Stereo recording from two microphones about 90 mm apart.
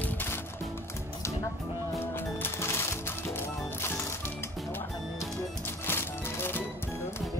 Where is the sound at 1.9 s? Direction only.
25° left (ahead or behind).